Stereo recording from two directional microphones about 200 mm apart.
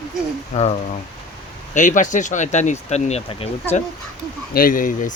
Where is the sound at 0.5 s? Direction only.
30° left (ahead or behind).